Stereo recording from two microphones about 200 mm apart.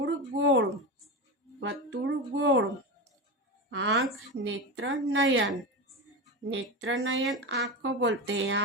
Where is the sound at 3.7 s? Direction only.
60° right (ahead or behind).